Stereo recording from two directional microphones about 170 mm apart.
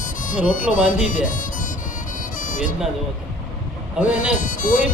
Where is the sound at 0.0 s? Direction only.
50° left (ahead or behind).